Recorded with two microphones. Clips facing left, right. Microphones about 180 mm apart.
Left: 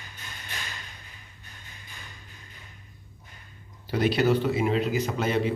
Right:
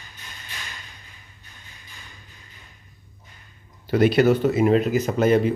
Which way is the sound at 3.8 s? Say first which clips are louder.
Right 6 dB; 55° right (ahead or behind).